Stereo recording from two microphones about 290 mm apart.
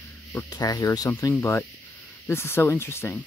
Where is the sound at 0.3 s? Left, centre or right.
Centre.